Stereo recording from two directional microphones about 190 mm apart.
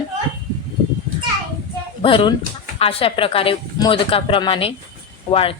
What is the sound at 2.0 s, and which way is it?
A woman's voice, 25° left (ahead or behind).